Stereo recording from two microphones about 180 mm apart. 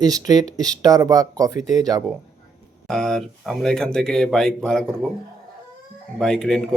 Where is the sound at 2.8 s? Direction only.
5° left (ahead or behind).